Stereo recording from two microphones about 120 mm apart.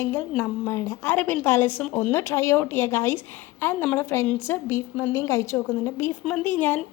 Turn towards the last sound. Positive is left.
turn(degrees=15)  # may be behind; listen again after turning